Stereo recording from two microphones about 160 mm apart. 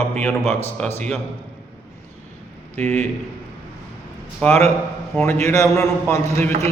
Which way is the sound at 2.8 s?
45° right (ahead or behind).